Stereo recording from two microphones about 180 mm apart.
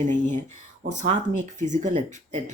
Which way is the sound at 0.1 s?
45° right (ahead or behind).